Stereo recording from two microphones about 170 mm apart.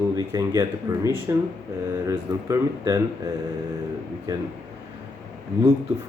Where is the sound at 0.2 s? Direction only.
20° right (ahead or behind).